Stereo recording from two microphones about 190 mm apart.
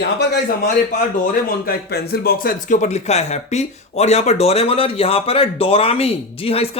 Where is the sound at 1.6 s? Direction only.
50° left (ahead or behind).